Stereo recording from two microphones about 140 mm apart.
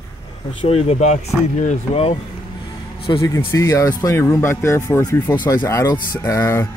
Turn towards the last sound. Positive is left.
turn(degrees=20)  # may be behind; listen again after turning